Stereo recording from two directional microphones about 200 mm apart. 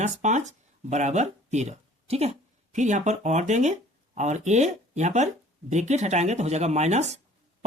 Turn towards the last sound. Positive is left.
turn(degrees=-35)  # may be behind; listen again after turning